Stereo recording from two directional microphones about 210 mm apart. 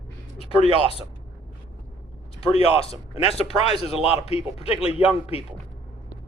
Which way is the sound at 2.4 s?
30° left (ahead or behind).